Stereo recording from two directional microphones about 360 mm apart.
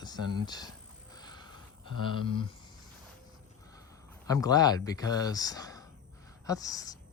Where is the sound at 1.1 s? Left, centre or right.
Centre.